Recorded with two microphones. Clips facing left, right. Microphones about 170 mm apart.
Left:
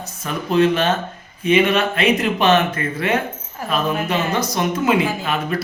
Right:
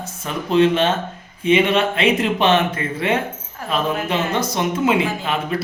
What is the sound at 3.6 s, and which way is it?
Speech, 5° left (ahead or behind).